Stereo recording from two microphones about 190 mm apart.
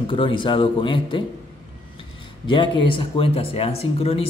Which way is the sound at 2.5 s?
25° left (ahead or behind).